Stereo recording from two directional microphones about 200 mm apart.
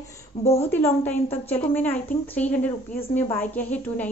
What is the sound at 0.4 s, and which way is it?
Speech, 30° left (ahead or behind).